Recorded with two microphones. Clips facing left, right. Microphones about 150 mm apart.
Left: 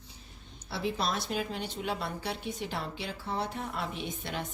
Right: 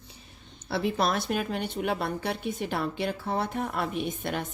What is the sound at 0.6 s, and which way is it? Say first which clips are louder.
A woman's voice: right 5 dB; 60° right (ahead or behind).